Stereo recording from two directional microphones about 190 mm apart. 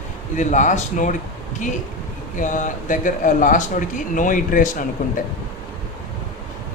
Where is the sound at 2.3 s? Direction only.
40° left (ahead or behind).